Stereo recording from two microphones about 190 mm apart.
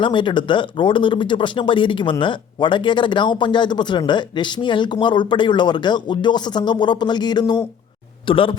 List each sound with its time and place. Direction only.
0.0 s speech: 25° left (ahead or behind)